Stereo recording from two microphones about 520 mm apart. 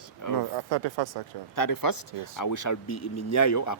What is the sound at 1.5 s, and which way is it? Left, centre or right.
Speech, left.